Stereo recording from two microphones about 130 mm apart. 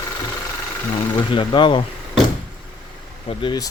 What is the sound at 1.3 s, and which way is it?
Speech, 40° left (ahead or behind).